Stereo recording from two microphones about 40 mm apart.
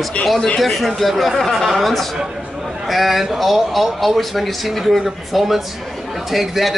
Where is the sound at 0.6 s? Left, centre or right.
Centre.